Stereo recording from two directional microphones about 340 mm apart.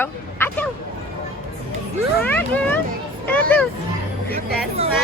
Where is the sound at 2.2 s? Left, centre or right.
Centre.